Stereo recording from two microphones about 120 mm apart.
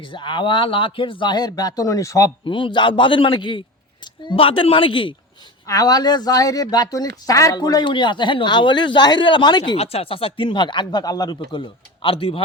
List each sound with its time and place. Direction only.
0.0 s speech: 40° left (ahead or behind); by 2.3 s 25° left (ahead or behind)
2.4 s speech: 45° left (ahead or behind)
5.6 s speech: 30° left (ahead or behind)
9.7 s speech: 55° left (ahead or behind); by 11.3 s 35° left (ahead or behind)
11.3 s speech: 45° left (ahead or behind)